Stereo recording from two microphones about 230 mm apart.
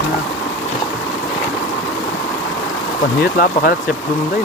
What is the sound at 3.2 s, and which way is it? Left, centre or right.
Speech, left.